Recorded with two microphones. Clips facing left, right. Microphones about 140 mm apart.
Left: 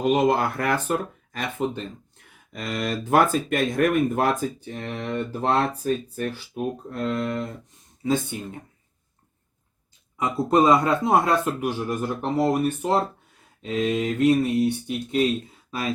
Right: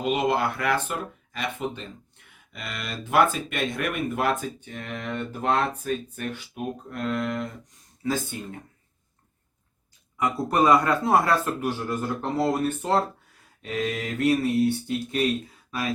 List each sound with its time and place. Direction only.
0.0 s speech: 45° left (ahead or behind); by 8.4 s 20° left (ahead or behind)
10.2 s speech: 20° left (ahead or behind)